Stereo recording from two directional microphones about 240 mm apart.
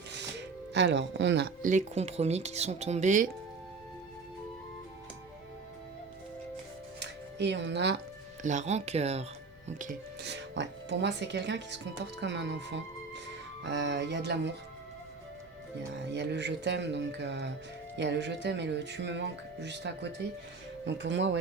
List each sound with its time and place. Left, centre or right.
0.1 s speech: right
7.0 s speech: right
8.4 s speech: right
16.1 s speech: right